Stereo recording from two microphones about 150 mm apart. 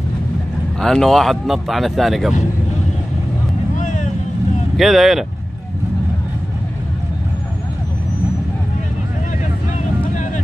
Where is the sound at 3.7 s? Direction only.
55° left (ahead or behind).